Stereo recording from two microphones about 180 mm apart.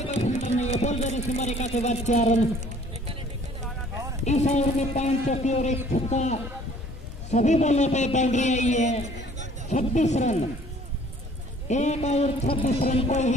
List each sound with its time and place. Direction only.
0.0 s speech: 35° left (ahead or behind)
4.3 s speech: 40° left (ahead or behind)
11.7 s speech: 40° left (ahead or behind)